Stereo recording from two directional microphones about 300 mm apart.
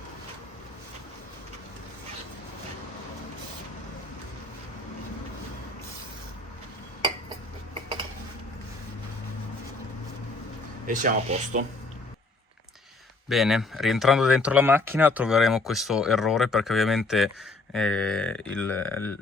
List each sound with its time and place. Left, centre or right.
10.8 s speech: right
13.2 s speech: centre